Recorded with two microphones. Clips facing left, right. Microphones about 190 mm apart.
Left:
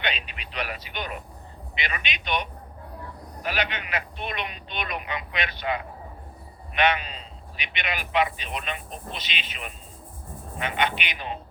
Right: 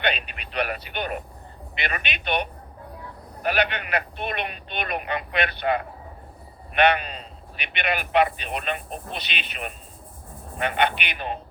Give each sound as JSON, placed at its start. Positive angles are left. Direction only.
{"t": 0.0, "sound": "radio", "side_deg": -55}
{"t": 1.8, "sound": "a man's voice", "side_deg": -55}